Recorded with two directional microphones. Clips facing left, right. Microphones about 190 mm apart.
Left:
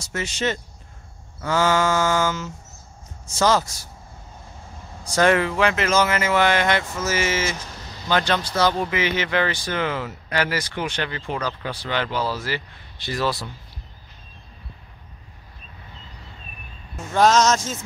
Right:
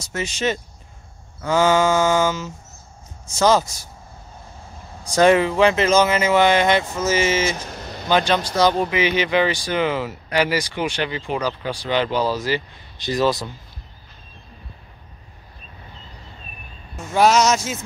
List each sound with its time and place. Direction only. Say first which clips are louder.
0.0 s speech: right 2 dB; 15° right (ahead or behind)
5.1 s speech: right 4 dB; 15° right (ahead or behind)
7.8 s a sound: right 6 dB; 60° right (ahead or behind)
8.1 s speech: right 3 dB; 15° right (ahead or behind)
17.1 s speech: right 1 dB; 10° right (ahead or behind)